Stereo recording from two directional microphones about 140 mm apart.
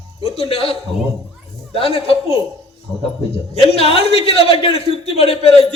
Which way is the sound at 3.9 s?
45° left (ahead or behind).